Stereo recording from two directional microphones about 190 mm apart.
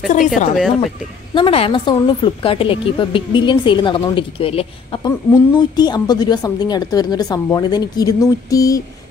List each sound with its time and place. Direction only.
0.6 s speech: centre (ahead or behind)
1.3 s a woman's voice: 30° left (ahead or behind)